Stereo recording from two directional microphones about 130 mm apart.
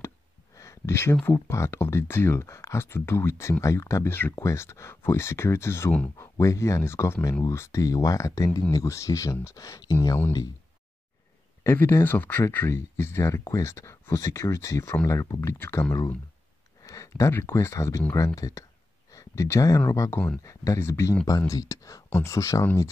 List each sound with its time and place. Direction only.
0.6 s a sound: 20° left (ahead or behind)
1.2 s speech: 20° left (ahead or behind)
11.6 s speech: 15° left (ahead or behind)